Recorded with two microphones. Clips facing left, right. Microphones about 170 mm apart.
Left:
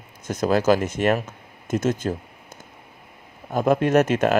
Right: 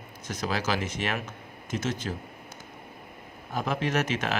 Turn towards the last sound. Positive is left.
turn(degrees=50)  # may be behind; listen again after turning